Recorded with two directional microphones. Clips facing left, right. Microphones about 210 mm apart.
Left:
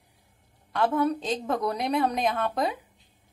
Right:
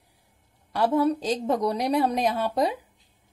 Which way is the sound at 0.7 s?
35° right (ahead or behind).